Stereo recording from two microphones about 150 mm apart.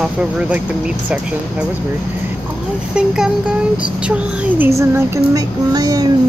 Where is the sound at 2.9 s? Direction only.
5° right (ahead or behind).